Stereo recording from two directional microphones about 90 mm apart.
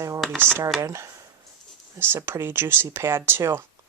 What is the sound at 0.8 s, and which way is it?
Speech, 35° right (ahead or behind).